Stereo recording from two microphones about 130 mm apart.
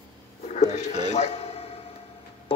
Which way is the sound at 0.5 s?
60° left (ahead or behind).